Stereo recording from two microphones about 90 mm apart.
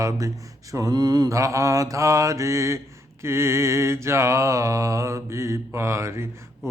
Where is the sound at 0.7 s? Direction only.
40° right (ahead or behind).